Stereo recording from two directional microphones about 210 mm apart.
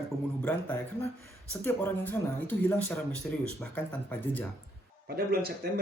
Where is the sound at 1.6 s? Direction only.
10° left (ahead or behind).